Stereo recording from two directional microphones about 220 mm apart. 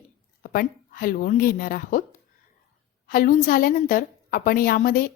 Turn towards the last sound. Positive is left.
turn(degrees=40)  # may be behind; listen again after turning